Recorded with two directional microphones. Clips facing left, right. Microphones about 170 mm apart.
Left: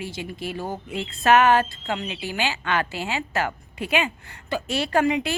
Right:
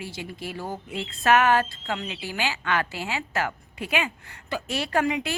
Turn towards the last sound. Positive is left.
turn(degrees=25)  # may be behind; listen again after turning